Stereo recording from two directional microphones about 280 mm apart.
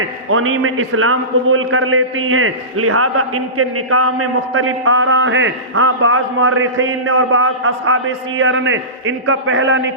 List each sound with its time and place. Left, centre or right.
0.0 s a man's voice: right